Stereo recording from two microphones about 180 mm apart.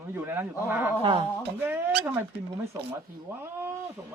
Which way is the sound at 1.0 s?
30° right (ahead or behind).